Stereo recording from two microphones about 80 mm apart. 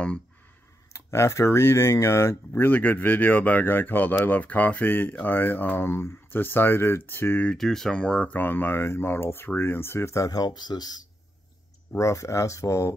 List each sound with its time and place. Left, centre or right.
0.9 s speech: left
7.5 s speech: centre; by 11.0 s left
12.0 s speech: left